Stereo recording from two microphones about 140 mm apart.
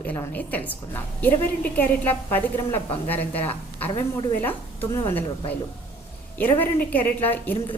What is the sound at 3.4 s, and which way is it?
A woman's voice, 15° left (ahead or behind).